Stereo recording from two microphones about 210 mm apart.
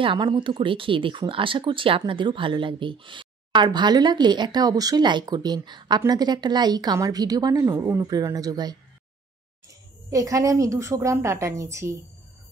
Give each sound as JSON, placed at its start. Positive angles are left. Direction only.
{"t": 0.0, "sound": "speech", "side_deg": -20}
{"t": 10.0, "sound": "a woman's voice", "side_deg": -15}